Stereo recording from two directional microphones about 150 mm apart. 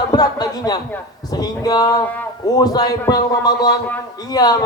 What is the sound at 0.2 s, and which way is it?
A man's voice, 25° left (ahead or behind).